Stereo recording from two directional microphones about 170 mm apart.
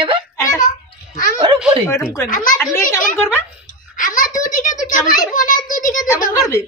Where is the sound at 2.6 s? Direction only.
15° left (ahead or behind).